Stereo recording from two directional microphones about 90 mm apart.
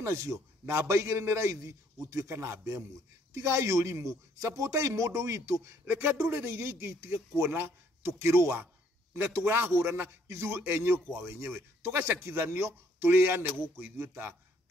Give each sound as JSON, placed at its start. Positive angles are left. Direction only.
{"t": 0.0, "sound": "a man's voice", "side_deg": -30}